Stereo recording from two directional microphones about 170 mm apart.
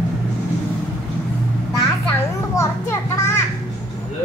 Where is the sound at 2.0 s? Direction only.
20° left (ahead or behind).